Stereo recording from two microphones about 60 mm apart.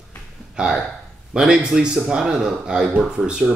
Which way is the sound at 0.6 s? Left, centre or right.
Centre.